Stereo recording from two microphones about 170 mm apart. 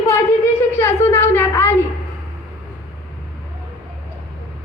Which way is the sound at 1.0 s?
15° left (ahead or behind).